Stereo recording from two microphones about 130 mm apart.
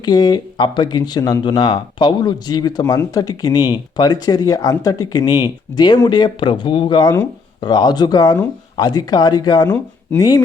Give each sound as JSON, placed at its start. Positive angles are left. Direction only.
{"t": 0.0, "sound": "speech", "side_deg": 30}
{"t": 9.6, "sound": "speech", "side_deg": 15}